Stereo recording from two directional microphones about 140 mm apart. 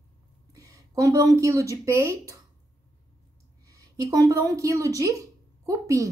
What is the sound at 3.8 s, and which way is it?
A woman's voice, 25° right (ahead or behind).